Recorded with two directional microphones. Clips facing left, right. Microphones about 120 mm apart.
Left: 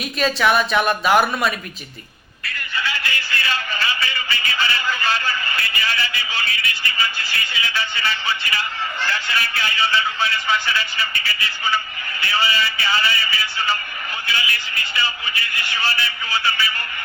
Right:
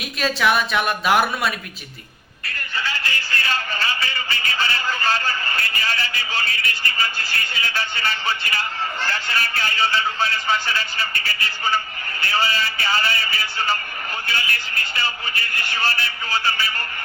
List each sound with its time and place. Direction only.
0.0 s speech: centre (ahead or behind)
2.7 s a sound: 40° right (ahead or behind)
12.2 s speech: 45° right (ahead or behind)